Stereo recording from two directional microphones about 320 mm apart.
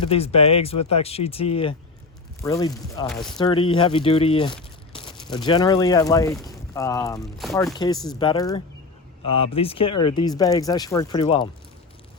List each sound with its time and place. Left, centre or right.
0.1 s speech: centre
3.3 s speech: centre